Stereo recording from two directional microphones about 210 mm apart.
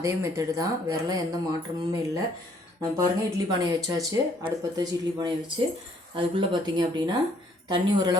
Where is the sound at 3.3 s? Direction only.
15° right (ahead or behind).